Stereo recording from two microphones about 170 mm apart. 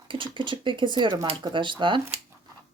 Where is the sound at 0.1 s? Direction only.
30° right (ahead or behind).